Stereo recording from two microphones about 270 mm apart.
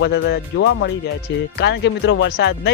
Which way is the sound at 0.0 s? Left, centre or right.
Left.